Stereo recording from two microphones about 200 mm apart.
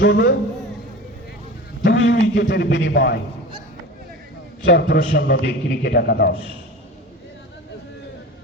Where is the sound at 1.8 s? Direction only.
60° left (ahead or behind).